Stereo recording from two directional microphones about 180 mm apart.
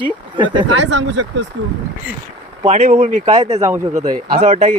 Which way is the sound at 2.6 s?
40° right (ahead or behind).